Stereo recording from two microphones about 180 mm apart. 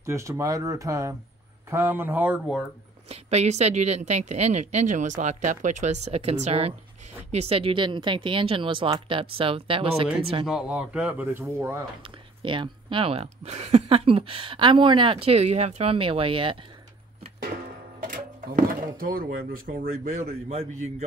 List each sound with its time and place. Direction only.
0.0 s speech: 15° right (ahead or behind)
3.1 s speech: 35° right (ahead or behind)
10.4 s speech: 5° right (ahead or behind)
12.4 s speech: 25° right (ahead or behind)
18.8 s speech: 55° right (ahead or behind); by 20.9 s 40° right (ahead or behind)